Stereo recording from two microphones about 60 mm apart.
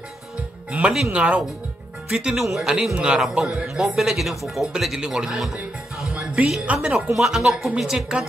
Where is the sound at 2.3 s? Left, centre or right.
Centre.